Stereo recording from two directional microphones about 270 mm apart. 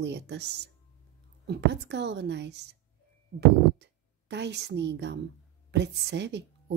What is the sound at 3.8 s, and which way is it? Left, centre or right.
A woman's voice, right.